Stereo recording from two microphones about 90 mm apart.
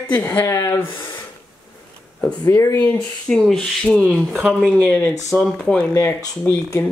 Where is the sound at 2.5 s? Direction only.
30° left (ahead or behind).